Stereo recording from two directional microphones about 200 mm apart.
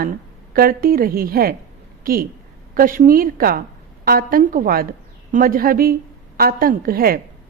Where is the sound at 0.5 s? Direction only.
45° right (ahead or behind).